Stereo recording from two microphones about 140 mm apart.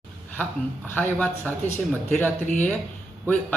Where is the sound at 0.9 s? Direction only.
10° left (ahead or behind).